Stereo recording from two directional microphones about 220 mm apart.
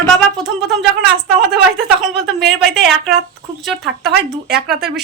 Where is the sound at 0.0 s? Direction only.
Centre (ahead or behind).